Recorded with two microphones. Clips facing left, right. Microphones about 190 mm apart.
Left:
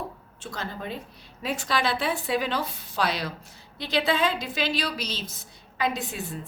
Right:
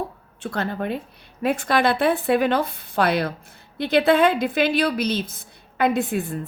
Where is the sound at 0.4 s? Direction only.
60° right (ahead or behind).